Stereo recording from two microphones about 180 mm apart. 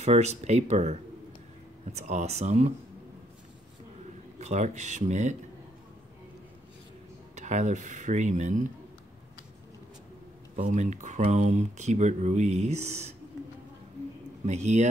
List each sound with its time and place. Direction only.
0.0 s speech: 35° right (ahead or behind)
4.4 s speech: 40° right (ahead or behind)
7.3 s speech: 40° right (ahead or behind)
10.5 s speech: 40° right (ahead or behind)
14.4 s speech: 40° right (ahead or behind)